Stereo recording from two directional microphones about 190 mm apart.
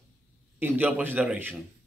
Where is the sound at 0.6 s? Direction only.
10° right (ahead or behind).